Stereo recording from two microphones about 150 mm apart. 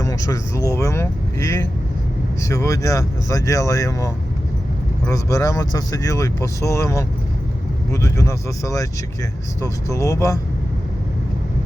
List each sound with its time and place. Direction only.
0.0 s speech: 20° left (ahead or behind)